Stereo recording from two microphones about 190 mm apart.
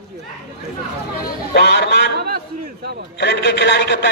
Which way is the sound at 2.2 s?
60° right (ahead or behind).